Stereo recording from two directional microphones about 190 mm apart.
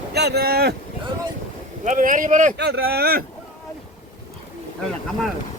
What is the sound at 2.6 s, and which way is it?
Speech, 55° right (ahead or behind).